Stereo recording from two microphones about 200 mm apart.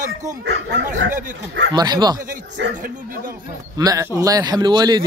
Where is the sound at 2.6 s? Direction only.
60° right (ahead or behind).